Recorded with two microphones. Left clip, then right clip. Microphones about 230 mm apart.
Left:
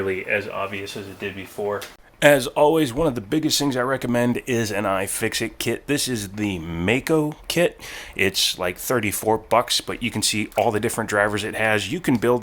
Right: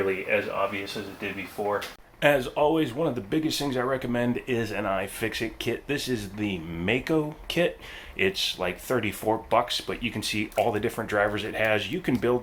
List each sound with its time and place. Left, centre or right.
1.6 s speech: left
2.2 s speech: left